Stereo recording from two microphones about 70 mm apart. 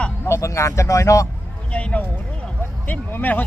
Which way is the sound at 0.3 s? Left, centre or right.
Left.